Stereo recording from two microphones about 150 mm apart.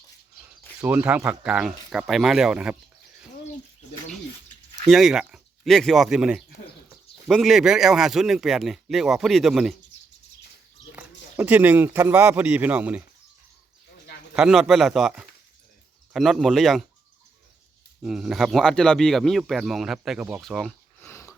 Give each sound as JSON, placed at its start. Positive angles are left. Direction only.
{"t": 0.9, "sound": "speech", "side_deg": -10}
{"t": 4.9, "sound": "speech", "side_deg": 0}
{"t": 10.9, "sound": "speech", "side_deg": -10}
{"t": 14.3, "sound": "speech", "side_deg": -5}
{"t": 18.0, "sound": "speech", "side_deg": -5}
{"t": 20.4, "sound": "a sound", "side_deg": 0}
{"t": 21.1, "sound": "wheeze", "side_deg": 20}